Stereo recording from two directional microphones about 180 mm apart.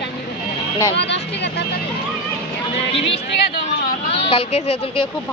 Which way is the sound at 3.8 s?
55° left (ahead or behind).